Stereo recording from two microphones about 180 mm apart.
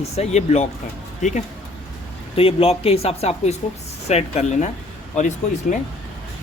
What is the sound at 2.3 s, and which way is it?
Speech, 30° left (ahead or behind).